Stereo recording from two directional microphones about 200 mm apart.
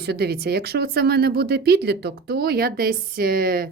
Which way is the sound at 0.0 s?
55° right (ahead or behind).